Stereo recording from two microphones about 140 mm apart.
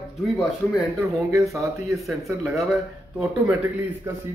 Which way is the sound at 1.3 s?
20° right (ahead or behind).